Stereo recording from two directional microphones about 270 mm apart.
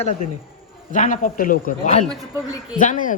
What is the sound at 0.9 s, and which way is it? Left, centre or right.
A man's voice, left.